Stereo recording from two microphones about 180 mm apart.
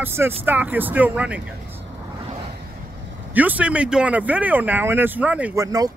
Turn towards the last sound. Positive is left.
turn(degrees=-20)  # may be behind; listen again after turning